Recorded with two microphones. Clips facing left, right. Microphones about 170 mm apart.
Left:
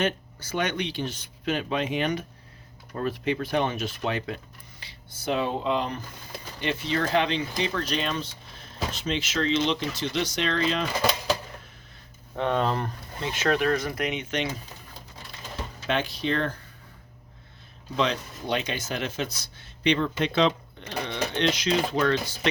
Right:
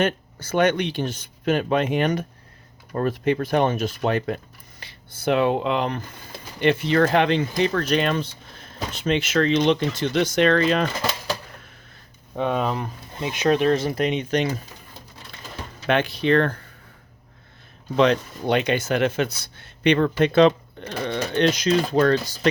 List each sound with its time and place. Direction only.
0.0 s speech: 50° right (ahead or behind)
12.4 s speech: 10° right (ahead or behind)
13.1 s speech: 15° right (ahead or behind); by 14.4 s 35° right (ahead or behind)
15.9 s speech: 60° right (ahead or behind)
17.9 s speech: 60° right (ahead or behind)